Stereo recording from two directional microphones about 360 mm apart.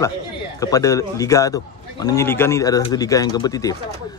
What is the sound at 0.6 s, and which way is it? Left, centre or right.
Speech, centre.